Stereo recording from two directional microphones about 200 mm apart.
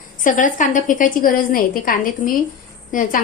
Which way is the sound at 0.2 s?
40° left (ahead or behind).